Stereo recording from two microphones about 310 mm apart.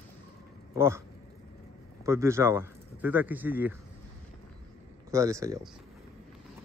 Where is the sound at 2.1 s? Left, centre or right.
Centre.